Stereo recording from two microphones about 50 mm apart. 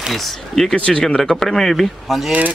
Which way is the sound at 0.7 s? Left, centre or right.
Left.